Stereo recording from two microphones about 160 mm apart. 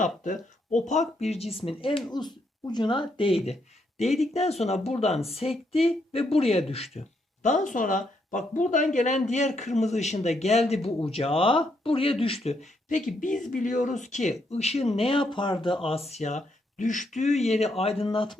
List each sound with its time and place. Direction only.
0.7 s speech: 50° left (ahead or behind)
7.4 s speech: 50° left (ahead or behind); by 12.1 s 35° left (ahead or behind)
12.5 s speech: 45° left (ahead or behind)
16.0 s speech: 45° left (ahead or behind)